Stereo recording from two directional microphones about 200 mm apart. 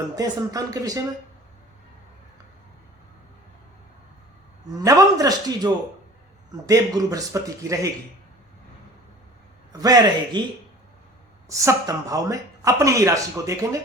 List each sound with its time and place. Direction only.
0.2 s speech: 15° right (ahead or behind)
4.8 s speech: 15° right (ahead or behind)
9.7 s a man's voice: 20° right (ahead or behind)
11.4 s speech: 15° right (ahead or behind)